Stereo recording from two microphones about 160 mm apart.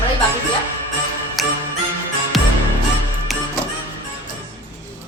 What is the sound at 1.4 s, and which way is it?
Music, centre (ahead or behind).